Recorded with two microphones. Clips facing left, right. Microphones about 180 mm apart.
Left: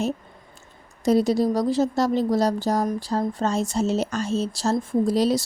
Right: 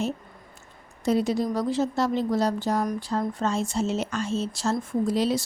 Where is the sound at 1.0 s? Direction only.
40° left (ahead or behind).